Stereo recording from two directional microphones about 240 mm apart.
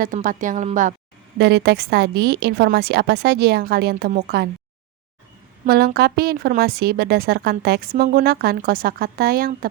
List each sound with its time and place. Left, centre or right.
0.0 s speech: right
1.4 s speech: right
5.6 s speech: right